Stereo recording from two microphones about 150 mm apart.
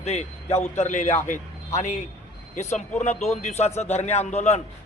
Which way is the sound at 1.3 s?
55° left (ahead or behind).